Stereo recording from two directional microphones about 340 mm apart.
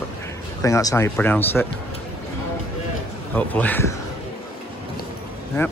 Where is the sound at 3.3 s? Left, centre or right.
Centre.